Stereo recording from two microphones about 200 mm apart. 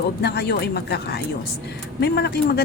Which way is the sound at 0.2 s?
55° left (ahead or behind).